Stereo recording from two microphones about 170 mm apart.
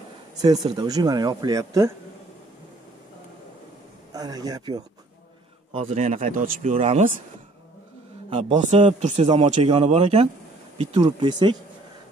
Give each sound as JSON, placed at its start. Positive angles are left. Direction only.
{"t": 0.4, "sound": "speech", "side_deg": -20}
{"t": 4.1, "sound": "speech", "side_deg": -20}
{"t": 5.9, "sound": "speech", "side_deg": -45}
{"t": 6.8, "sound": "speech", "side_deg": -40}
{"t": 8.3, "sound": "speech", "side_deg": -40}
{"t": 11.0, "sound": "speech", "side_deg": -25}